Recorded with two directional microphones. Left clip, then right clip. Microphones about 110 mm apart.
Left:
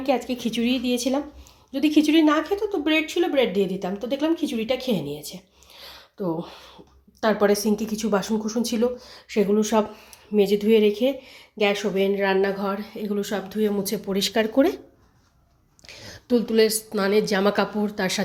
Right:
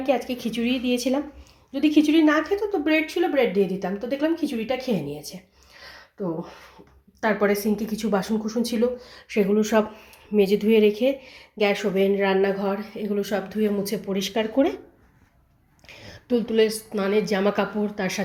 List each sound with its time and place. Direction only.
0.0 s a woman's voice: 25° left (ahead or behind)
2.5 s a woman's voice: 10° left (ahead or behind)
7.2 s a woman's voice: 30° left (ahead or behind)
14.0 s a woman's voice: 35° left (ahead or behind)
15.9 s a woman's voice: 25° left (ahead or behind)